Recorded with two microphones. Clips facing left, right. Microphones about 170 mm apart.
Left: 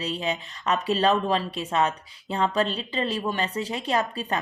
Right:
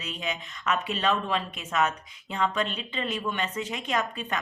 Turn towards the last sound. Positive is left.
turn(degrees=35)  # may be behind; listen again after turning